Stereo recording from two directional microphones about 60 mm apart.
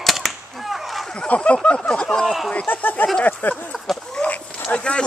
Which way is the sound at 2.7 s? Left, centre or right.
Left.